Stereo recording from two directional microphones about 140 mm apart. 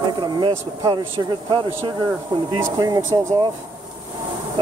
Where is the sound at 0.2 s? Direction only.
30° right (ahead or behind).